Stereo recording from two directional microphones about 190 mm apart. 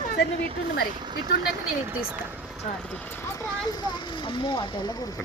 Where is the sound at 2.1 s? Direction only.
5° right (ahead or behind).